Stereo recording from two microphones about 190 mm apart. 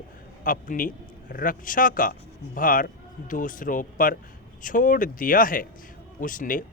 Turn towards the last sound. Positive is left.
turn(degrees=45)  # may be behind; listen again after turning